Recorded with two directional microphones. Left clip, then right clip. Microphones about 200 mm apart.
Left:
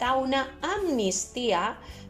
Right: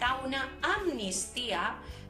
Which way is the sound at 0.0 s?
35° left (ahead or behind).